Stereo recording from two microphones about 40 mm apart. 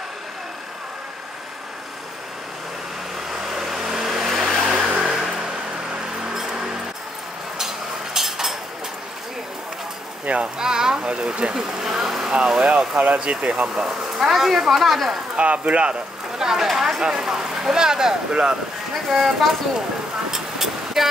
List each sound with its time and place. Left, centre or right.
3.3 s vehicle: centre
6.3 s music: centre
7.5 s stir: centre
10.4 s speech: centre
11.5 s speech: centre
12.9 s speech: right
13.8 s speech: centre
15.3 s speech: right
16.3 s speech: centre
19.0 s speech: centre
20.2 s vehicle: centre